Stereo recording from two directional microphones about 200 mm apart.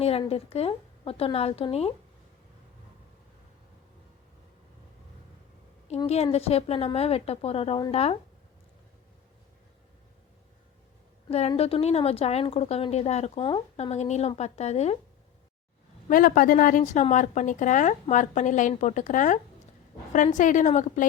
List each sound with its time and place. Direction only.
0.0 s a woman's voice: 30° left (ahead or behind)
6.1 s a woman's voice: 30° left (ahead or behind)
11.3 s a woman's voice: 30° left (ahead or behind)
13.9 s a woman's voice: 35° left (ahead or behind)
16.0 s a woman's voice: 45° left (ahead or behind)